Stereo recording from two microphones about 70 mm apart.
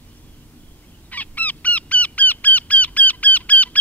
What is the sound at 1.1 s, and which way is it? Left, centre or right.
Goose, left.